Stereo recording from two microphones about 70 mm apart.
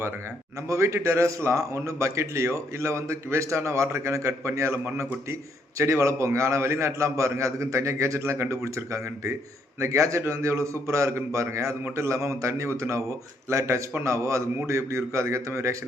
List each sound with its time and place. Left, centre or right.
0.7 s a man's voice: right